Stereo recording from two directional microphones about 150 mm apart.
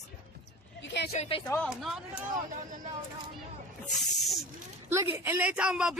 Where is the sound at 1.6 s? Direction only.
Centre (ahead or behind).